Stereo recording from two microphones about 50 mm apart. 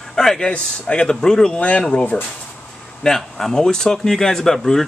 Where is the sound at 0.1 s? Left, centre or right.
Centre.